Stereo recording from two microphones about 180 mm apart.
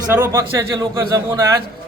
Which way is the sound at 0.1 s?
15° right (ahead or behind).